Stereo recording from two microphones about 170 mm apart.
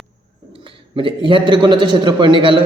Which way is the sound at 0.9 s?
30° right (ahead or behind).